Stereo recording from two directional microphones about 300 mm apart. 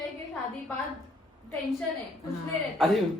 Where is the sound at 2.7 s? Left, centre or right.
Centre.